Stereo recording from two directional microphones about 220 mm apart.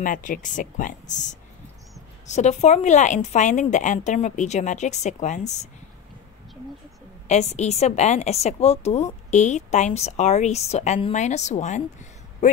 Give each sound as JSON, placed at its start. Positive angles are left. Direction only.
{"t": 0.0, "sound": "a woman's voice", "side_deg": 35}
{"t": 7.2, "sound": "a woman's voice", "side_deg": 30}